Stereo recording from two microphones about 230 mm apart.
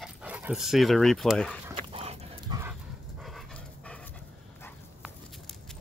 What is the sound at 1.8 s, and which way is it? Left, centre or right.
Dog, right.